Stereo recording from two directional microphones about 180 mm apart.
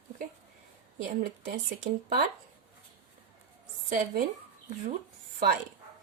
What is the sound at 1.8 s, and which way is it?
Speech, 55° right (ahead or behind).